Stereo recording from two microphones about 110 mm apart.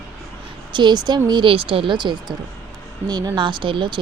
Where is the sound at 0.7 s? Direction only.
40° right (ahead or behind).